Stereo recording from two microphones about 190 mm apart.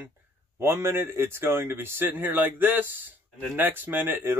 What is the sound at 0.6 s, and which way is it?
A man's voice, 15° right (ahead or behind).